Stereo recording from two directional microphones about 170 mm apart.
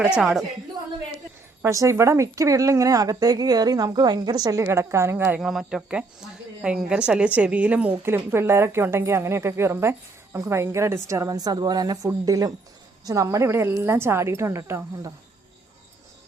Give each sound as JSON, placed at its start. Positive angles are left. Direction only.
{"t": 0.0, "sound": "a woman's voice", "side_deg": -5}
{"t": 1.6, "sound": "a woman's voice", "side_deg": -20}